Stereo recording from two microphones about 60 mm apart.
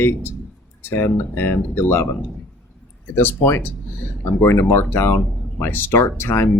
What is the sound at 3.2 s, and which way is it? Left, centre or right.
Speech, left.